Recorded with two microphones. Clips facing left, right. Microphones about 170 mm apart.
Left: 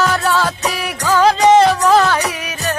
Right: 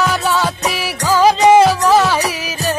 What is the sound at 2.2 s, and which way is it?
Music, 30° right (ahead or behind).